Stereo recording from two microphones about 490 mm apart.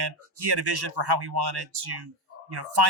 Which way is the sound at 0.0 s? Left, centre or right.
Right.